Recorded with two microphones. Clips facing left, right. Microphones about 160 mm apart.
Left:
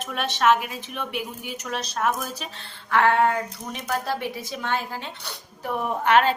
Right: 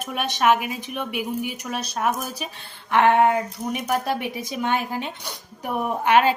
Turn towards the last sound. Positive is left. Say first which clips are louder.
# right 1 dB
turn(degrees=-10)  # may be behind; listen again after turning